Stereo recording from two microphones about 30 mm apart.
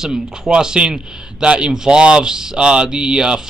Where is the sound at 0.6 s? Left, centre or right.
Right.